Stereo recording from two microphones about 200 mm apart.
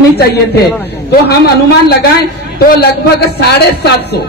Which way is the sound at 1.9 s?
50° left (ahead or behind).